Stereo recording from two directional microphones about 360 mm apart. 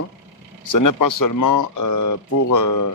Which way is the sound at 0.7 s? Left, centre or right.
Left.